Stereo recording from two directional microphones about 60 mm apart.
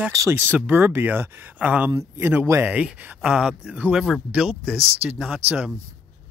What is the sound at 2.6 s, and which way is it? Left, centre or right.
Speech, right.